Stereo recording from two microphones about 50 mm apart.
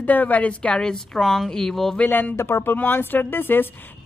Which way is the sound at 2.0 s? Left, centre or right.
Left.